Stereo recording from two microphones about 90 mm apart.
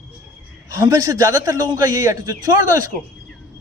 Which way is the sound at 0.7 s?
40° right (ahead or behind).